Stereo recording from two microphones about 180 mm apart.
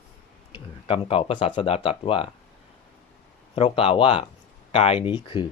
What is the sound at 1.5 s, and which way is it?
Speech, 30° left (ahead or behind).